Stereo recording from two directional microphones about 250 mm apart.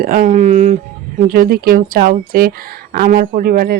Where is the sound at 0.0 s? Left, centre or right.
Right.